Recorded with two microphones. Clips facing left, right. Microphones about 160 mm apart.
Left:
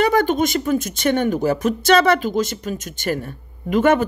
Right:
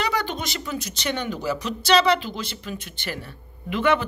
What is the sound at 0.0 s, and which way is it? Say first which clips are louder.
Speech: left 10 dB; 50° left (ahead or behind).